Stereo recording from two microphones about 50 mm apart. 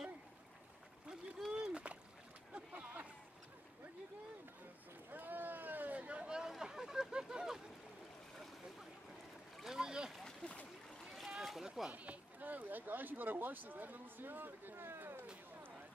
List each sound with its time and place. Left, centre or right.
1.6 s splash: right
2.5 s a sound: right
5.1 s vehicle: right; by 6.5 s centre
6.6 s a sound: centre
9.6 s boat: centre
10.2 s splash: left
11.1 s rowboat: centre
11.9 s speech: right